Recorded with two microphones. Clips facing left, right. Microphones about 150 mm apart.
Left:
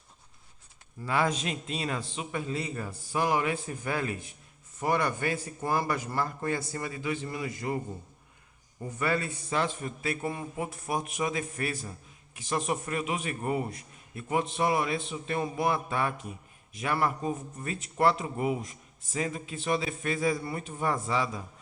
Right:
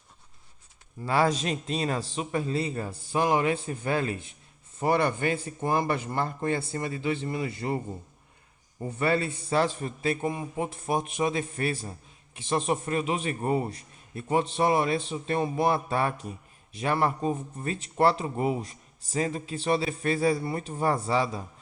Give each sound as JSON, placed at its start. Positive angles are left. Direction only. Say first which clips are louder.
{"t": 1.0, "sound": "a man's voice", "louder": "right 4 dB", "side_deg": -35}
{"t": 9.0, "sound": "a man's voice", "louder": "right 4 dB", "side_deg": -30}